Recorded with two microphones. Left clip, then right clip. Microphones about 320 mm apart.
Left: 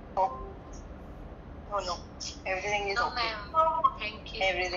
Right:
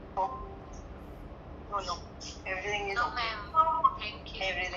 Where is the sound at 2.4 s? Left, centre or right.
Left.